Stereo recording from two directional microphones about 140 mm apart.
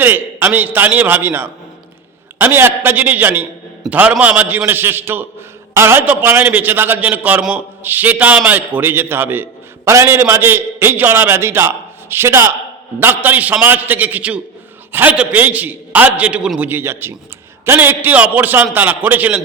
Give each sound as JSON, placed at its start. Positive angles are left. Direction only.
{"t": 0.0, "sound": "a man's voice", "side_deg": -15}